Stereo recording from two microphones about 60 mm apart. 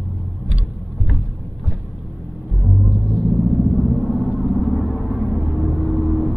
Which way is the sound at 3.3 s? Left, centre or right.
Centre.